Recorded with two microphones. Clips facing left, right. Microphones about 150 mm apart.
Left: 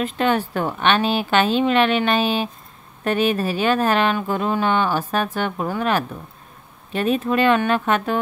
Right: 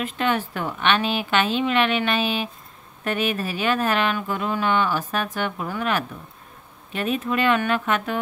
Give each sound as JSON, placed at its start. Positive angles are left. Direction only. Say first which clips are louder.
{"t": 0.0, "sound": "speech", "louder": "left 4 dB", "side_deg": 35}